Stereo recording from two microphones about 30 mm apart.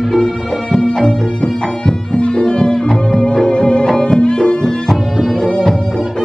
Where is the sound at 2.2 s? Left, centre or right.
Left.